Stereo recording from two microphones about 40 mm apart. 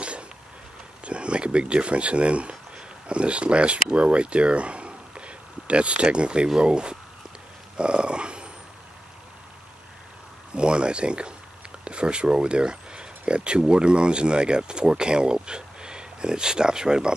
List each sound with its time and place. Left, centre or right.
1.0 s speech: right
7.7 s a sound: right
10.5 s speech: right